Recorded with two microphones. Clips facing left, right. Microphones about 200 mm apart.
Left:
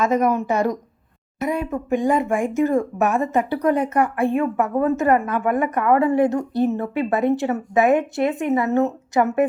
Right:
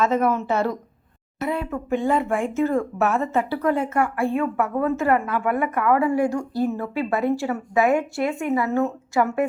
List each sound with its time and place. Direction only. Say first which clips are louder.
0.0 s speech: left 2 dB; 15° left (ahead or behind)